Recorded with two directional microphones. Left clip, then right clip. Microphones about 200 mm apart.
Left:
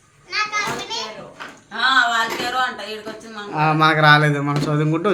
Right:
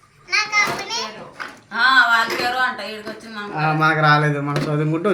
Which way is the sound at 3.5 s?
15° left (ahead or behind).